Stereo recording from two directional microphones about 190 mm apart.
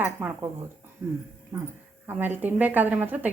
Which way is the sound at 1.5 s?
20° right (ahead or behind).